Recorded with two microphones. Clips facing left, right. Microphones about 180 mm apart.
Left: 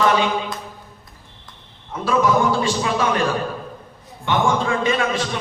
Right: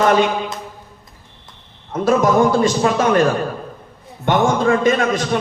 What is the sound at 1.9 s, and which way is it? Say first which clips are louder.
A man's voice: right 3 dB; 45° right (ahead or behind).